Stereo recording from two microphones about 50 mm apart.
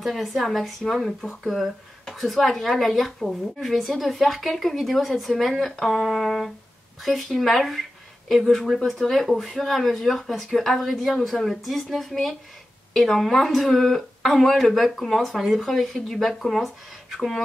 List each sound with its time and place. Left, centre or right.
0.0 s speech: centre